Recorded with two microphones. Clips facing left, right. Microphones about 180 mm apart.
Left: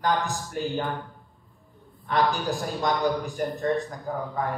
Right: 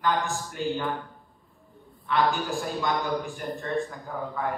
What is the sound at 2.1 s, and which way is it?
A man's voice, 40° left (ahead or behind).